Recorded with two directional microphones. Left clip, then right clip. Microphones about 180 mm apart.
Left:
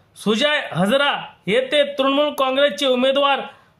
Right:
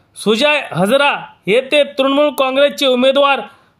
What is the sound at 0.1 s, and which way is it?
Speech, 30° right (ahead or behind).